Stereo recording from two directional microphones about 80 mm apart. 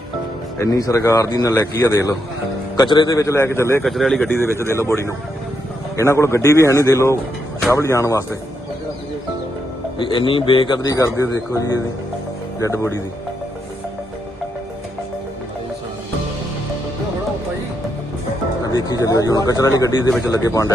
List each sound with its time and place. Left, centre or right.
0.6 s speech: left
1.5 s a man's voice: left
1.9 s speech: left
2.8 s a man's voice: left
3.1 s a man's voice: left
3.8 s speech: centre
4.3 s a man's voice: left
6.0 s a man's voice: left
10.0 s speech: left
10.8 s speech: left
18.6 s a man's voice: left